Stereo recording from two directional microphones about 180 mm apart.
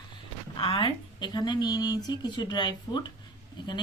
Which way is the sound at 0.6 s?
30° left (ahead or behind).